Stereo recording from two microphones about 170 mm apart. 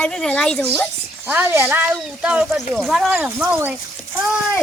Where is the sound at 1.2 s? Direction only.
10° right (ahead or behind).